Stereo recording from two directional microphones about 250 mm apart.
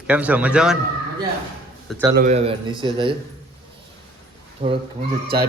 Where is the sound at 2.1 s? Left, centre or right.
Right.